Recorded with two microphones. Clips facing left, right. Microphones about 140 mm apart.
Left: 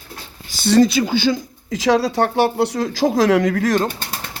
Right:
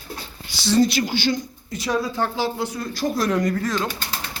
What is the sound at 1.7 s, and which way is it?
Speech, 90° left.